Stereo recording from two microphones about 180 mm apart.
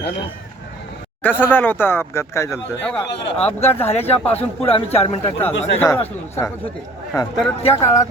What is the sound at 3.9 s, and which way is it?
Speech, 35° left (ahead or behind).